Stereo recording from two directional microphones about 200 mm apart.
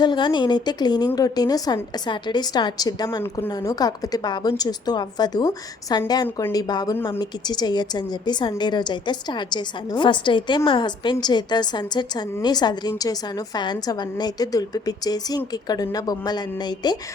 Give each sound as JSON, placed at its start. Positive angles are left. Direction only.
{"t": 0.0, "sound": "a woman's voice", "side_deg": 20}